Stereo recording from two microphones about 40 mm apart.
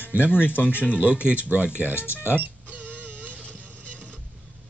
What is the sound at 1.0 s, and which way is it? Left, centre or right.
Speech, right.